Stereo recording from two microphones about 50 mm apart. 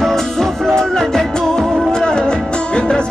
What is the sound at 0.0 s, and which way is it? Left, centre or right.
Music, centre.